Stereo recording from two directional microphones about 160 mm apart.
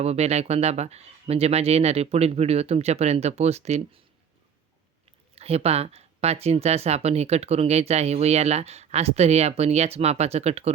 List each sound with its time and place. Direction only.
0.0 s speech: 40° right (ahead or behind)
5.3 s speech: 40° right (ahead or behind)